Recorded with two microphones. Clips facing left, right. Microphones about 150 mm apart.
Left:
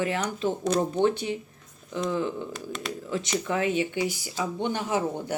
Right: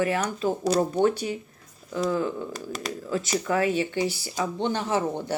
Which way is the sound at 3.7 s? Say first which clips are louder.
Right 1 dB; 15° left (ahead or behind).